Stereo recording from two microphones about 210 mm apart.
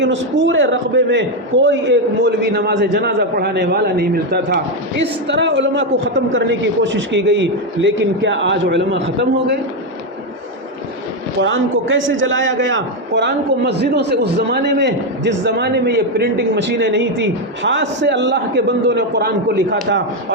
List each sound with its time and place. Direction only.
0.0 s a man's voice: 60° right (ahead or behind)
11.3 s a man's voice: 60° right (ahead or behind)